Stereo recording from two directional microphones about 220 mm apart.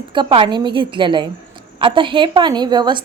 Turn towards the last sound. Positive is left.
turn(degrees=-20)  # may be behind; listen again after turning